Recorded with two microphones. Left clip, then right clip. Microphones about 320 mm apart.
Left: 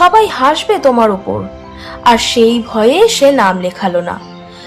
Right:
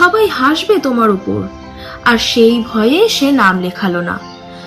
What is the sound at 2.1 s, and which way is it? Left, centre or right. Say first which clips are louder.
Speech: even; centre.